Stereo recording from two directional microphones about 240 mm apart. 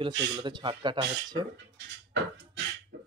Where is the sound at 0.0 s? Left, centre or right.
Centre.